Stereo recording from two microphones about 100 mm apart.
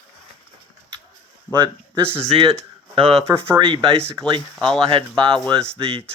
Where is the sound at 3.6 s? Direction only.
60° right (ahead or behind).